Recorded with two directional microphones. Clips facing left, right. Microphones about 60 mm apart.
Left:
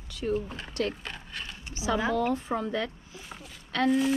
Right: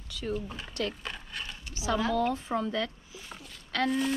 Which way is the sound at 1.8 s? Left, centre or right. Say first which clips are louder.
Left 1 dB; left.